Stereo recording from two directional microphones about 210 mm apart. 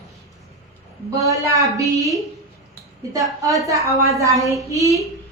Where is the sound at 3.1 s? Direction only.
15° right (ahead or behind).